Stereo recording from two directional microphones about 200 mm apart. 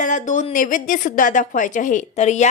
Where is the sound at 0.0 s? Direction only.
40° left (ahead or behind).